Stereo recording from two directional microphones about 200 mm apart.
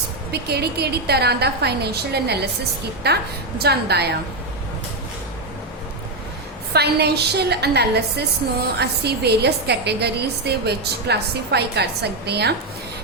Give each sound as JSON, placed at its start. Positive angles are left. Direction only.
{"t": 0.3, "sound": "a woman's voice", "side_deg": -55}
{"t": 6.7, "sound": "a woman's voice", "side_deg": -55}